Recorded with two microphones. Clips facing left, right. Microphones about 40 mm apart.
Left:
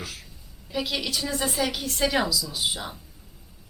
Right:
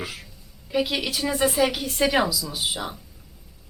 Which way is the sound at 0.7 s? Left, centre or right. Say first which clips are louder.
Right 4 dB; centre.